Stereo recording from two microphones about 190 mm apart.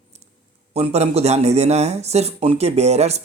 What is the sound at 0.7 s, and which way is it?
Speech, 35° right (ahead or behind).